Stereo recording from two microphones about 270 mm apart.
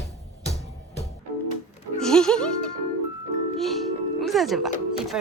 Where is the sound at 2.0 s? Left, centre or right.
Centre.